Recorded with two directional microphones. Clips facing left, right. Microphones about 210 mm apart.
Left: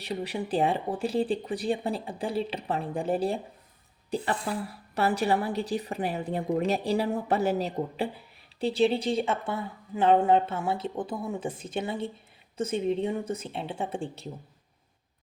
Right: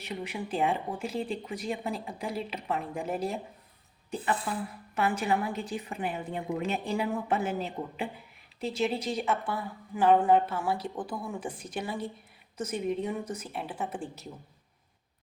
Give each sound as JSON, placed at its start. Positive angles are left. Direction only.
{"t": 0.0, "sound": "a woman's voice", "side_deg": 35}